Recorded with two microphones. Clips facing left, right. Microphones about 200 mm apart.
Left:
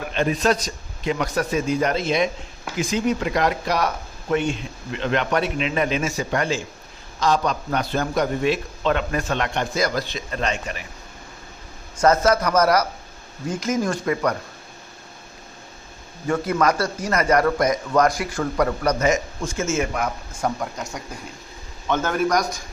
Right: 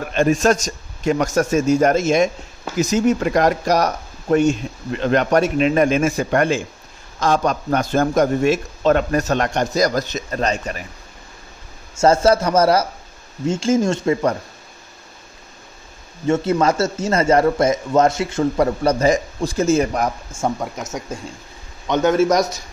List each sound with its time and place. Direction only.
0.1 s speech: 45° right (ahead or behind)
11.9 s speech: 25° right (ahead or behind)
16.3 s speech: 25° right (ahead or behind)
20.3 s speech: 20° right (ahead or behind)